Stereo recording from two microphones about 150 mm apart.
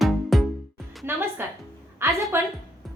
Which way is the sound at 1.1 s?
15° right (ahead or behind).